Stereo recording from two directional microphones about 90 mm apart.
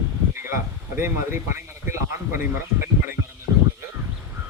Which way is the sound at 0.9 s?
30° right (ahead or behind).